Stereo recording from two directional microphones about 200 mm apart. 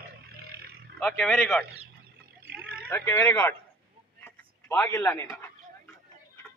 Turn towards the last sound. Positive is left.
turn(degrees=15)  # may be behind; listen again after turning